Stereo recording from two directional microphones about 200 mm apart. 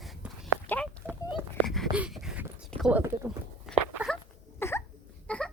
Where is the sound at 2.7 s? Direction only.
Centre (ahead or behind).